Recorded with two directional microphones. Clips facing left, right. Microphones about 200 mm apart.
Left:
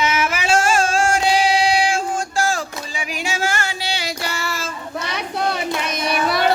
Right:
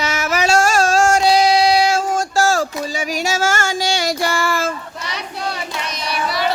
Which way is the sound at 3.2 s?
45° right (ahead or behind).